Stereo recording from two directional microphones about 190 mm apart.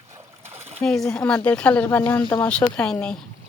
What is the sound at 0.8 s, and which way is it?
Speech, 5° left (ahead or behind).